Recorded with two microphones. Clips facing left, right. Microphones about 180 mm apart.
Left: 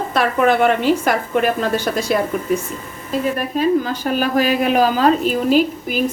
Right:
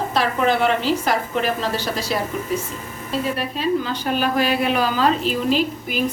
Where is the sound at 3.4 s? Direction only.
45° left (ahead or behind).